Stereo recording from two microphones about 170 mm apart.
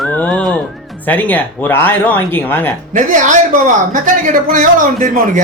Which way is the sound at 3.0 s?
45° right (ahead or behind).